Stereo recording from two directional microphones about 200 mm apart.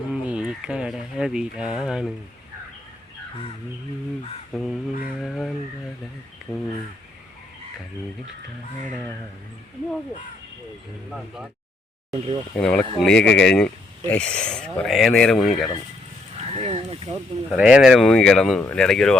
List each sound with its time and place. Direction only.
0.1 s speech: 5° right (ahead or behind)
4.5 s speech: centre (ahead or behind)
12.5 s speech: 5° left (ahead or behind)
16.5 s speech: 30° right (ahead or behind)
17.5 s speech: 5° right (ahead or behind)